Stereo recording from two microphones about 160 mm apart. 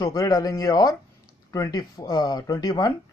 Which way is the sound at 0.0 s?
20° left (ahead or behind).